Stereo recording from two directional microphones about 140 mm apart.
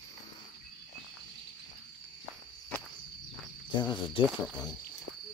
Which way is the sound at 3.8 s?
30° left (ahead or behind).